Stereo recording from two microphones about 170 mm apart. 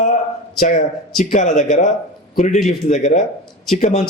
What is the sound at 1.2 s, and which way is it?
A man's voice, 45° left (ahead or behind).